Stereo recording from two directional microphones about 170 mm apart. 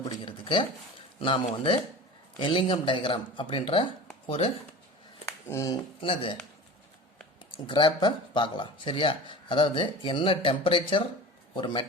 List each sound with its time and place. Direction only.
0.3 s a sound: 30° left (ahead or behind)
1.2 s speech: 30° left (ahead or behind)
5.2 s speech: 20° left (ahead or behind)
7.7 s speech: 25° left (ahead or behind)